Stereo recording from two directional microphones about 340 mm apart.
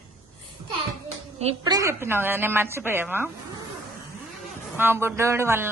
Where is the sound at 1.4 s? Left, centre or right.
Centre.